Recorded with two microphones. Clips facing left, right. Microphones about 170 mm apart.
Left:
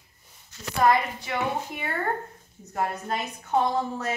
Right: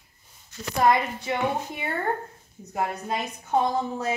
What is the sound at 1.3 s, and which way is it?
Speech, 25° right (ahead or behind).